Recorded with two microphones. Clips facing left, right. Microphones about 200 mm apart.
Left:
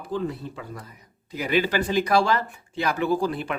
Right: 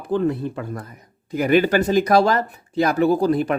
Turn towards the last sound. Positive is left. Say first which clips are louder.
# right 7 dB
turn(degrees=-40)  # may be behind; listen again after turning